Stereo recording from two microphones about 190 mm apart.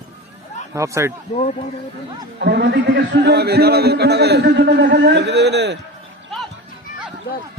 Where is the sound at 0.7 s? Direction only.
15° right (ahead or behind).